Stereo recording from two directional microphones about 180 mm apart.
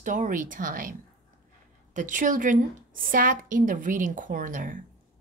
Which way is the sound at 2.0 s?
45° right (ahead or behind).